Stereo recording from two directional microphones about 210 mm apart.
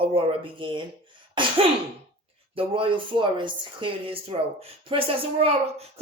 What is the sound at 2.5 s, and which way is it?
Speech, 25° right (ahead or behind).